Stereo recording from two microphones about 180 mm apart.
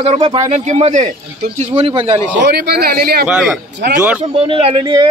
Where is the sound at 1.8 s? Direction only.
30° right (ahead or behind).